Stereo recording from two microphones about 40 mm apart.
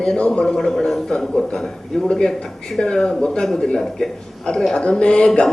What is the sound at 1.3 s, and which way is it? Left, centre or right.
A man's voice, left.